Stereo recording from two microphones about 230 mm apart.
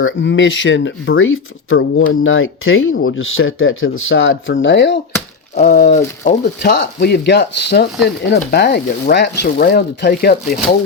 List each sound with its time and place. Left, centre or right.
0.0 s speech: left
5.5 s speech: left